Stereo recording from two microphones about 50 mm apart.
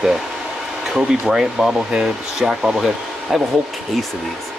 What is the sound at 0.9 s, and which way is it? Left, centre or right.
Speech, centre.